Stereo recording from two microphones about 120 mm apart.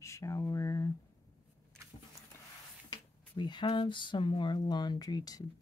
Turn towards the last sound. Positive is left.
turn(degrees=35)  # may be behind; listen again after turning